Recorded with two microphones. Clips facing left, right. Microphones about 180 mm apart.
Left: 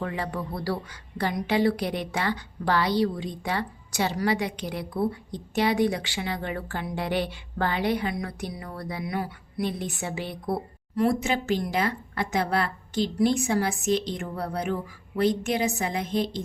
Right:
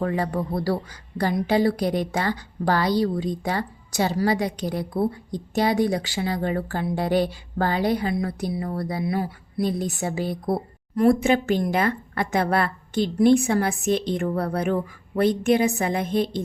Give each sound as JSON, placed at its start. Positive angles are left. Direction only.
{"t": 0.0, "sound": "a woman's voice", "side_deg": -40}